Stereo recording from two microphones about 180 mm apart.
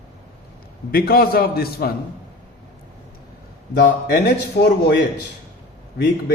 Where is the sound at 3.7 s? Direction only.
60° left (ahead or behind).